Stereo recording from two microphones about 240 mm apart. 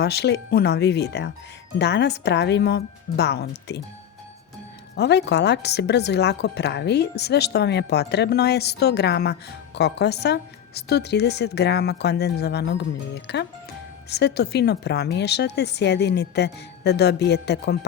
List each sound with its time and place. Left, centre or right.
0.0 s a woman's voice: left
4.9 s a woman's voice: left